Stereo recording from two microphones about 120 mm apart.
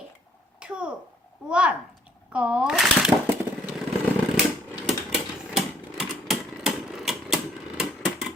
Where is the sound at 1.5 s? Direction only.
10° right (ahead or behind).